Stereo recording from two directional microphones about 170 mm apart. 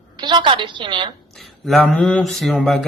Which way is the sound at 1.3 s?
Centre (ahead or behind).